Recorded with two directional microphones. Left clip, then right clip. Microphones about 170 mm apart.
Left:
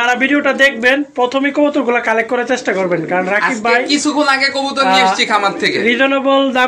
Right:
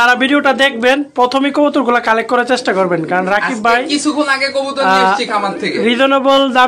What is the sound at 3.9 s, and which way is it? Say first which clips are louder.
Speech: left 1 dB; 75° left (ahead or behind).